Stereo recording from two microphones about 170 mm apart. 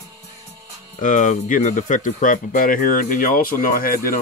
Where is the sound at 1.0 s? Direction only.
45° left (ahead or behind).